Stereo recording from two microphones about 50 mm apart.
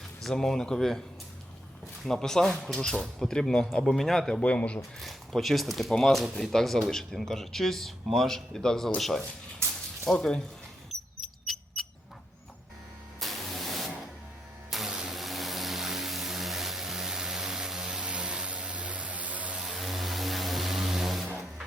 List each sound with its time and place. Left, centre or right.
0.2 s speech: centre
2.0 s speech: centre
4.4 s speech: left
4.9 s speech: centre
9.6 s a sound: right
10.2 s speech: centre
11.2 s mouse: centre
13.1 s spray: centre
14.8 s vehicle: centre
15.1 s vehicle: centre; by 19.5 s right
19.5 s vehicle: centre